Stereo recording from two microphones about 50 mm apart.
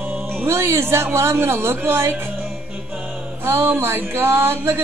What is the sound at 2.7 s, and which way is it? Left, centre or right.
Music, right.